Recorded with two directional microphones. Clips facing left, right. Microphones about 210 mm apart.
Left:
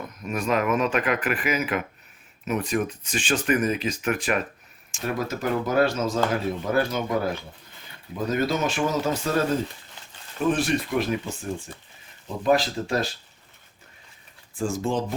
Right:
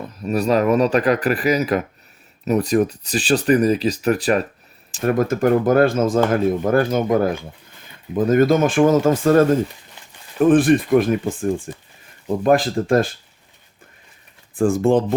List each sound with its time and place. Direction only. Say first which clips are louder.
0.2 s speech: right 7 dB; 35° right (ahead or behind)
5.0 s speech: right 10 dB; 50° right (ahead or behind)
14.5 s speech: right 10 dB; 55° right (ahead or behind)